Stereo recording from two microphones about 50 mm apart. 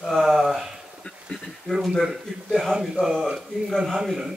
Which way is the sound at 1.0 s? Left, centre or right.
Centre.